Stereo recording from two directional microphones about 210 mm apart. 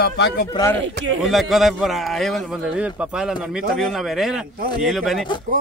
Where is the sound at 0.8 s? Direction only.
60° right (ahead or behind).